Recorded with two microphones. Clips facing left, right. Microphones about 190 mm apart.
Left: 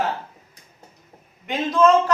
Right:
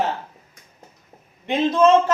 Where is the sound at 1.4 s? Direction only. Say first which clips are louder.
Right 2 dB; 25° right (ahead or behind).